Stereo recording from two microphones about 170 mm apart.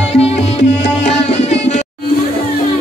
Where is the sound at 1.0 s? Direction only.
40° left (ahead or behind).